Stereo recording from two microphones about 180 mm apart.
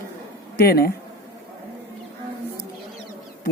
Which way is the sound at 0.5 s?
60° left (ahead or behind).